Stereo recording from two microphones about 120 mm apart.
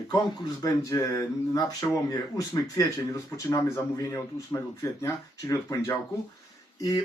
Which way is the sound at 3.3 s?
25° left (ahead or behind).